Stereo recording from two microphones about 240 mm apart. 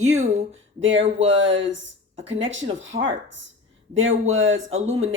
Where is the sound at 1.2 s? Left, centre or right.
Right.